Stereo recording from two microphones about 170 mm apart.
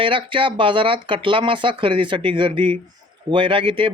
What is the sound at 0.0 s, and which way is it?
Speech, 30° right (ahead or behind).